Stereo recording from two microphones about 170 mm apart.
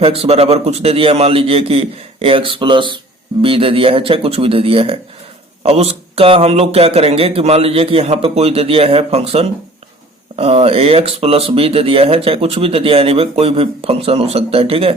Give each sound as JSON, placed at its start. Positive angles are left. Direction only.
{"t": 0.0, "sound": "speech", "side_deg": -35}